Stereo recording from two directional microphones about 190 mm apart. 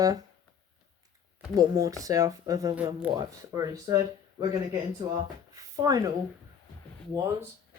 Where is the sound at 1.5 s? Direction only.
20° right (ahead or behind).